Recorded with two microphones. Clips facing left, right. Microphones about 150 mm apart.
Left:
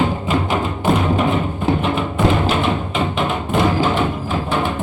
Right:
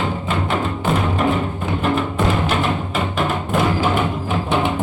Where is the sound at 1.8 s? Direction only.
Centre (ahead or behind).